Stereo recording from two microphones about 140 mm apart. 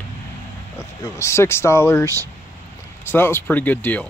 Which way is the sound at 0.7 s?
20° left (ahead or behind).